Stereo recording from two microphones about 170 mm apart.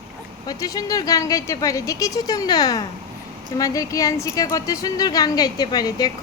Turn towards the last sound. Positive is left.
turn(degrees=25)  # may be behind; listen again after turning